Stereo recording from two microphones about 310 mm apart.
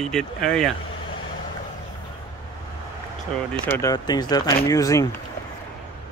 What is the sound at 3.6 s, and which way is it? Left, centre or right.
Speech, centre.